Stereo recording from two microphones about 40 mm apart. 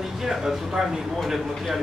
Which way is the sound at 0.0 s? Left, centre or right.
Centre.